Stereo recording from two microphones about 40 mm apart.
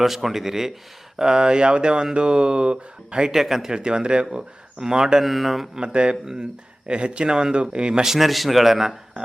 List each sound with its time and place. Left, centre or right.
0.0 s speech: centre; by 3.3 s right
3.3 s speech: centre
3.7 s speech: right
5.2 s a man's voice: centre
5.7 s speech: right
8.0 s a man's voice: centre